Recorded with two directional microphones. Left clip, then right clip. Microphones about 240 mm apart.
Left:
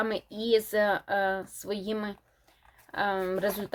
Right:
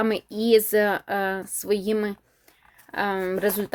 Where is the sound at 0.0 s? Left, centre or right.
Right.